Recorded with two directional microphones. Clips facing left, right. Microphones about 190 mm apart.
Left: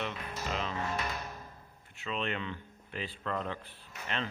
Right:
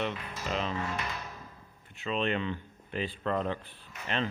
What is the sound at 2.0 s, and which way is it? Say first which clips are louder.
Speech: right 5 dB; 30° right (ahead or behind).